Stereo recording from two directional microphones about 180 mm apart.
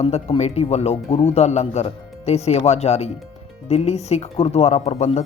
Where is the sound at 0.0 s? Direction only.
35° left (ahead or behind).